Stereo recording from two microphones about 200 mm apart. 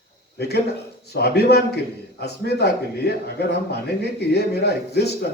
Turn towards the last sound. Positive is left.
turn(degrees=55)  # may be behind; listen again after turning